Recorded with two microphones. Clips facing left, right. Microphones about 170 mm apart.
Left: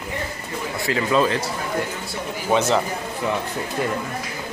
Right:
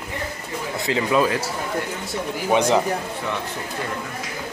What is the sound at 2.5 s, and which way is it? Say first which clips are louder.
Speech: right 1 dB; 15° right (ahead or behind).